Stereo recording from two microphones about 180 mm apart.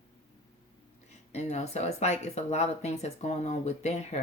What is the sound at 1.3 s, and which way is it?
Speech, 35° left (ahead or behind).